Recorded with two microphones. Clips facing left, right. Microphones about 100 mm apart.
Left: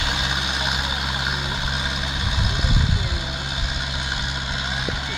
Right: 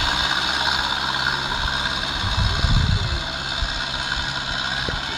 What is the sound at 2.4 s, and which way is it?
Vehicle, 25° right (ahead or behind).